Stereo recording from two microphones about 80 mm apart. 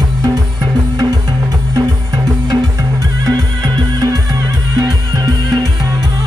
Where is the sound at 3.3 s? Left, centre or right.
Right.